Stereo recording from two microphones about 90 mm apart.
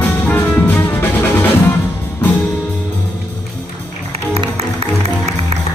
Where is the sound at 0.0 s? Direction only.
20° left (ahead or behind).